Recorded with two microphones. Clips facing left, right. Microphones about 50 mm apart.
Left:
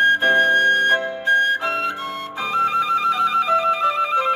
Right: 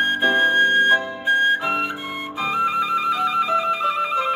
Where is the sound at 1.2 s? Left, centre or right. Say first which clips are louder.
Left 1 dB; centre.